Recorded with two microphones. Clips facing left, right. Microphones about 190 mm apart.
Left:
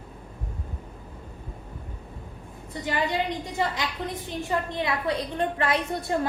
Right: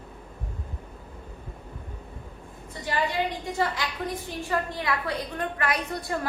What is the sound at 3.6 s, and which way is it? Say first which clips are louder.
A woman's voice: right 1 dB; 20° left (ahead or behind).